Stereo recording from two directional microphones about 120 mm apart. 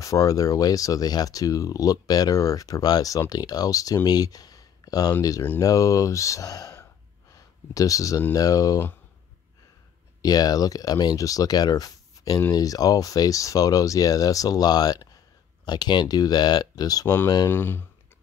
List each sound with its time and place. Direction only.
0.0 s speech: 30° left (ahead or behind)
7.3 s a sound: 30° left (ahead or behind)
8.3 s speech: 30° left (ahead or behind)
10.2 s speech: 30° left (ahead or behind)
17.5 s speech: 20° left (ahead or behind)